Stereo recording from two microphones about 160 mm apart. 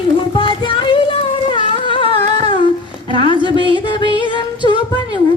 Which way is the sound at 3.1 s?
30° left (ahead or behind).